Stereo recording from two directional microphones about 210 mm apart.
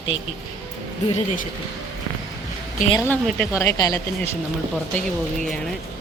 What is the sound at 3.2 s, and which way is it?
Speech, 5° left (ahead or behind).